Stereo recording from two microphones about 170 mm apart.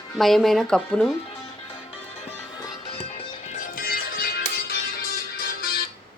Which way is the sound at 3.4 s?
50° left (ahead or behind).